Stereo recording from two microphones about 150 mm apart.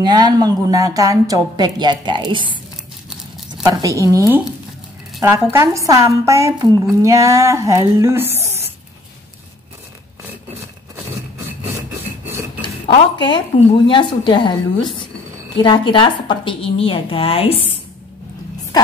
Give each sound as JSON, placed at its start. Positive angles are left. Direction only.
{"t": 0.0, "sound": "a woman's voice", "side_deg": -25}
{"t": 3.6, "sound": "a woman's voice", "side_deg": -20}
{"t": 12.6, "sound": "a woman's voice", "side_deg": 30}